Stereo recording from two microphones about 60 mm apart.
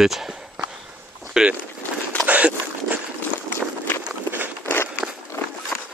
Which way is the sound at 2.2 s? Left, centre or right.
Right.